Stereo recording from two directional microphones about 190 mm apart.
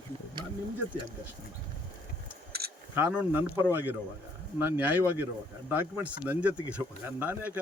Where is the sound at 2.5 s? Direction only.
55° right (ahead or behind).